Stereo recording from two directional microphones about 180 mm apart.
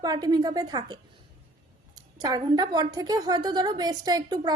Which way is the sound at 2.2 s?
25° right (ahead or behind).